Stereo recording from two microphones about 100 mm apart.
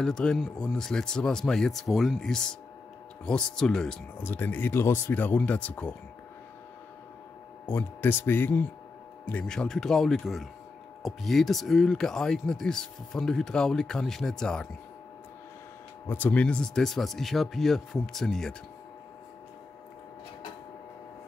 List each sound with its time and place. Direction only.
0.0 s speech: 5° left (ahead or behind)
4.2 s speech: 20° left (ahead or behind)
7.6 s speech: 20° left (ahead or behind)
9.3 s speech: 10° left (ahead or behind)
16.1 s speech: 15° left (ahead or behind)